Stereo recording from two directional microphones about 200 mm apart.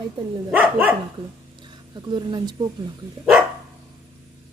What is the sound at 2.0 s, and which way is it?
Speech, 20° right (ahead or behind).